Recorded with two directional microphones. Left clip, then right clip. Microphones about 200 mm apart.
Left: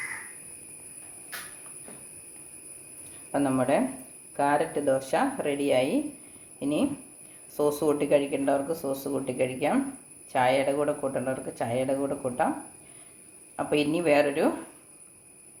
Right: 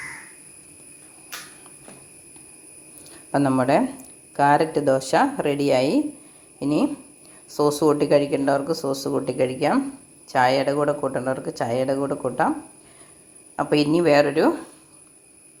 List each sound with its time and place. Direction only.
3.3 s a man's voice: 35° right (ahead or behind)
13.6 s a man's voice: 30° right (ahead or behind)